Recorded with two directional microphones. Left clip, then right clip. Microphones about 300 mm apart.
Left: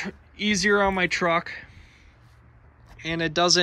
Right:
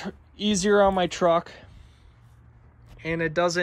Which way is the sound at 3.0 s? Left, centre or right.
Centre.